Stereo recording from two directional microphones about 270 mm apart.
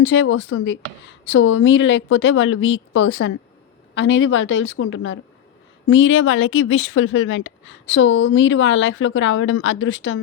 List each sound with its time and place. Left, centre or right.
0.0 s speech: left